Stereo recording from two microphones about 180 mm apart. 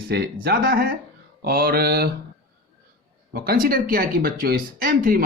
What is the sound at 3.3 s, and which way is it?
Speech, 60° right (ahead or behind).